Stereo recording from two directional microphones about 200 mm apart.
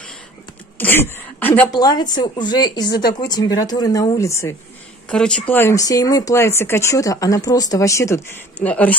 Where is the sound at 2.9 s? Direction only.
50° left (ahead or behind).